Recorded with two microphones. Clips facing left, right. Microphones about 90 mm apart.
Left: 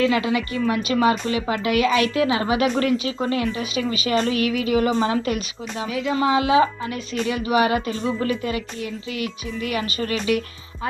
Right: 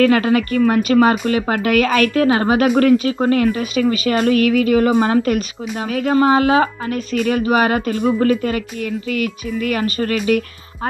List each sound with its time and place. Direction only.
0.0 s a woman's voice: 50° right (ahead or behind)